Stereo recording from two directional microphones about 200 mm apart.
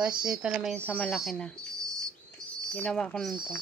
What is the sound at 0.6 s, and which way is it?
A woman's voice, 5° left (ahead or behind).